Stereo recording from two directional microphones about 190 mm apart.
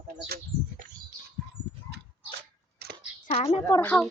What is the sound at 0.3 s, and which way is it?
Speech, 55° right (ahead or behind).